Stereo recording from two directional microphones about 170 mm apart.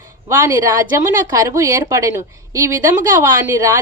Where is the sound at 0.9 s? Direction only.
20° right (ahead or behind).